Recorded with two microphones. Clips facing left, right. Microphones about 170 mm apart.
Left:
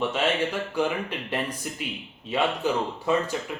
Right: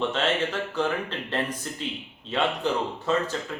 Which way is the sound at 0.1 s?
10° left (ahead or behind).